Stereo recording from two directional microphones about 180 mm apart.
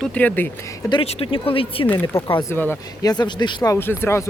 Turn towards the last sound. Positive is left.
turn(degrees=15)  # may be behind; listen again after turning